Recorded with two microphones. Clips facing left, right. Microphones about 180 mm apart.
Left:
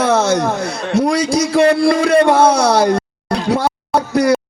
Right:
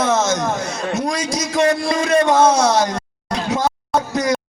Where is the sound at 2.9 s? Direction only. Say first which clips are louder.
Left 5 dB; 30° left (ahead or behind).